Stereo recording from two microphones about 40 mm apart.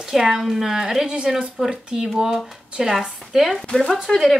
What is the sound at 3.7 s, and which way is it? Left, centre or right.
Speech, centre.